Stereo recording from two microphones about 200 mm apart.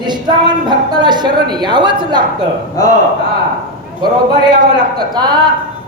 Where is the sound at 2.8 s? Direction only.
15° left (ahead or behind).